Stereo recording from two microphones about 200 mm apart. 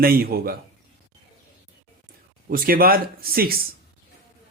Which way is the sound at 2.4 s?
45° right (ahead or behind).